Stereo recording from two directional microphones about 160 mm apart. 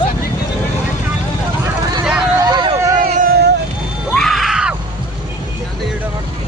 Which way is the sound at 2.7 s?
20° right (ahead or behind).